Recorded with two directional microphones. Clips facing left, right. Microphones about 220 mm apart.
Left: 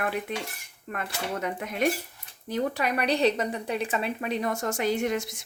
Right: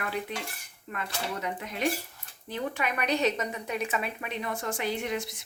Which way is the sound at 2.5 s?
35° left (ahead or behind).